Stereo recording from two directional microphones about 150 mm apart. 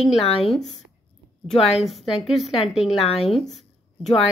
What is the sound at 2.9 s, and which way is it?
Speech, 40° left (ahead or behind).